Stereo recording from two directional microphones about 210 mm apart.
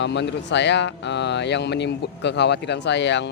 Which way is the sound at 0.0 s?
55° left (ahead or behind).